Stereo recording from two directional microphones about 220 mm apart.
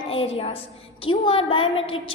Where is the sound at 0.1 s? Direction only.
25° left (ahead or behind).